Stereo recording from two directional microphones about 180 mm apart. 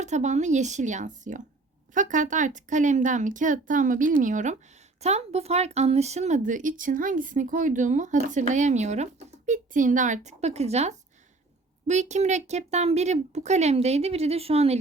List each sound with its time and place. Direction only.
0.0 s speech: 40° right (ahead or behind)